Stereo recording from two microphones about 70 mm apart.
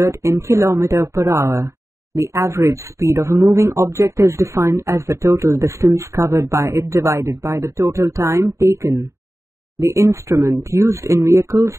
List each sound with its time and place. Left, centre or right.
0.0 s speech: right